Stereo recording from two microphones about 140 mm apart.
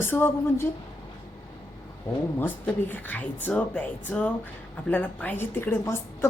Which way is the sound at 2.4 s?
15° left (ahead or behind).